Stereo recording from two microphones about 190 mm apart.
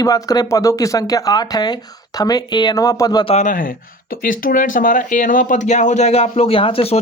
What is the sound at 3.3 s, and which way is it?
Speech, 40° left (ahead or behind).